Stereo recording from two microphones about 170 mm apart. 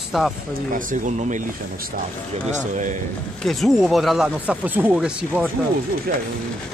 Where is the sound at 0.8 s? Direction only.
50° right (ahead or behind).